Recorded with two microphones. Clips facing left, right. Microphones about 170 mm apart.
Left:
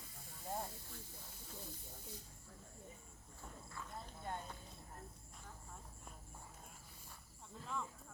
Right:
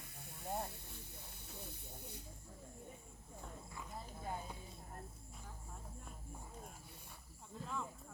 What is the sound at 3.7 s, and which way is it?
Horse, 15° right (ahead or behind).